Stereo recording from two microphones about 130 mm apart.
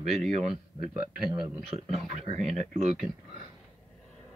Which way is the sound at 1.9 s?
55° right (ahead or behind).